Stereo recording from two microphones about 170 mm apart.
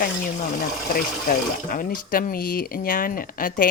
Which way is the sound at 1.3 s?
60° left (ahead or behind).